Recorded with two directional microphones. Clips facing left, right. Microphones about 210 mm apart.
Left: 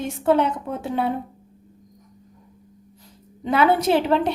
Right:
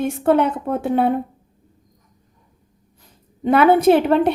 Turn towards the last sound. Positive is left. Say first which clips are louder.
# right 5 dB
turn(degrees=-55)  # may be behind; listen again after turning